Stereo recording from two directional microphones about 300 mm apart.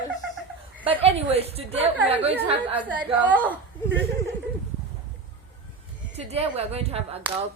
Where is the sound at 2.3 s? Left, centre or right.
Centre.